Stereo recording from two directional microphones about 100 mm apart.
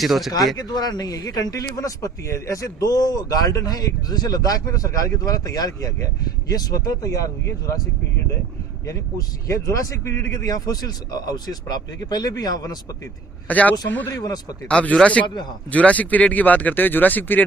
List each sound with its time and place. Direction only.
0.0 s speech: centre (ahead or behind)
0.3 s speech: 40° left (ahead or behind)
8.9 s speech: 30° left (ahead or behind)
13.5 s speech: 15° left (ahead or behind)
14.1 s speech: 35° left (ahead or behind)
14.7 s speech: 10° left (ahead or behind)